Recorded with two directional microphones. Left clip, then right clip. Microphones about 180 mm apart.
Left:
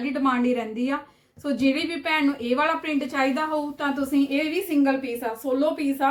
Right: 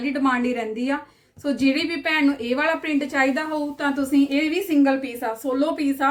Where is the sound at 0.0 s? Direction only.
15° right (ahead or behind).